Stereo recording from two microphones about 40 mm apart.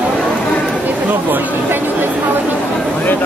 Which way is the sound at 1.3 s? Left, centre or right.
Right.